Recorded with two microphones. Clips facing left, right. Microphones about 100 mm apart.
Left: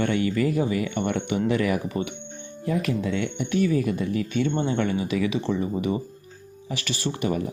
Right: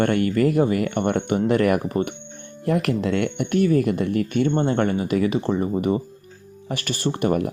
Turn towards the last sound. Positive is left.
turn(degrees=-55)  # may be behind; listen again after turning